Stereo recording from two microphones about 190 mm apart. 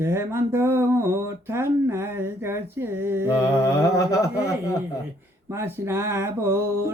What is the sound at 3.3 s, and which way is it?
Mantra, 15° left (ahead or behind).